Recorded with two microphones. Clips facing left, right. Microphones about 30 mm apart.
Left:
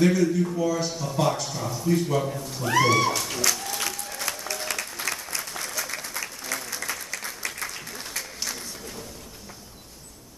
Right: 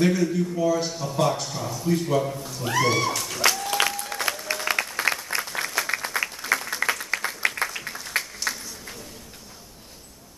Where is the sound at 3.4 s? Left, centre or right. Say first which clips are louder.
Right 11 dB; right.